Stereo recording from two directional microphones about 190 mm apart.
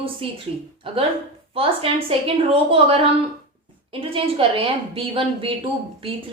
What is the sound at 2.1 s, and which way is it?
A woman's voice, 30° right (ahead or behind).